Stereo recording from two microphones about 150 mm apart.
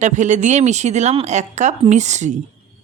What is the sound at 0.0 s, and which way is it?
Speech, 55° right (ahead or behind).